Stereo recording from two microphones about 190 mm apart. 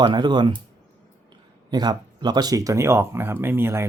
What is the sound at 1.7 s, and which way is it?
Speech, 20° right (ahead or behind).